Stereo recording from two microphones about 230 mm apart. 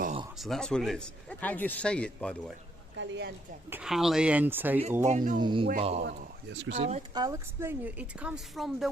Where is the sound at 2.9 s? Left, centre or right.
Right.